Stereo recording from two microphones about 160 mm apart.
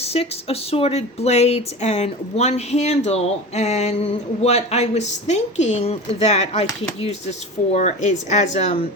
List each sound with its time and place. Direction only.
0.0 s speech: 40° left (ahead or behind)